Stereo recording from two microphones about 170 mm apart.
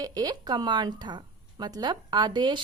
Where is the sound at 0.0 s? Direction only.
20° right (ahead or behind).